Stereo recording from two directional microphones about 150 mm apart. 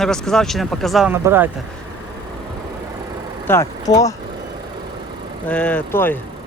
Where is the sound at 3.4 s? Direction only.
15° left (ahead or behind).